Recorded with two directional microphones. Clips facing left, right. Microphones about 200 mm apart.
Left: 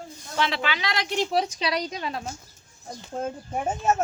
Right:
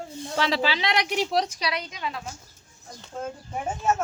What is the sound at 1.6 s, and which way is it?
Speech, 35° left (ahead or behind).